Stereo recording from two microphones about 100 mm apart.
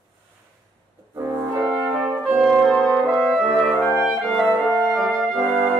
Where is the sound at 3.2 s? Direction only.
10° left (ahead or behind).